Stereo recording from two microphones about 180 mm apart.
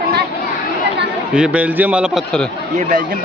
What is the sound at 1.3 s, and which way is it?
A man's voice, 5° right (ahead or behind).